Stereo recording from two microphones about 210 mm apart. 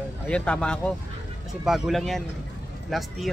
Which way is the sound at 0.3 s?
5° left (ahead or behind).